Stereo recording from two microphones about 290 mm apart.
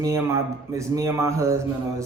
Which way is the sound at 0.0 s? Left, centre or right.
Centre.